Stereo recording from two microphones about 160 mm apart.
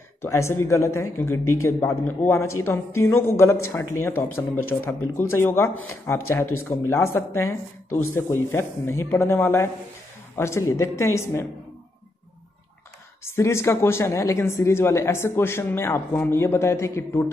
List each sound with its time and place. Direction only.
0.2 s speech: 15° left (ahead or behind)
13.2 s speech: 15° left (ahead or behind)